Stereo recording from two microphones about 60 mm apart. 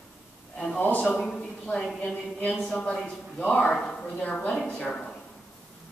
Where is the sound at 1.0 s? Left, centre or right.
Centre.